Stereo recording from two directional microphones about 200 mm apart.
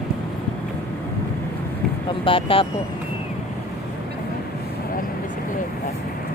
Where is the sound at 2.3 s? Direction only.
25° left (ahead or behind).